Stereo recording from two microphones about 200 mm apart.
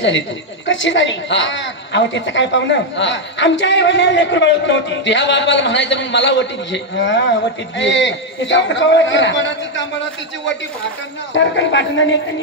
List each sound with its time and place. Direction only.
0.7 s a woman's voice: 70° left (ahead or behind)
11.3 s speech: 65° left (ahead or behind)